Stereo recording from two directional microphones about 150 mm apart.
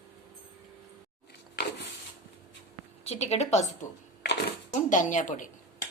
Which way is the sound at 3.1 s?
45° left (ahead or behind).